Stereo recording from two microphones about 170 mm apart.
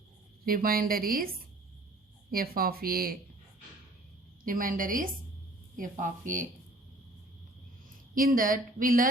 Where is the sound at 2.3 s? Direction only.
60° right (ahead or behind).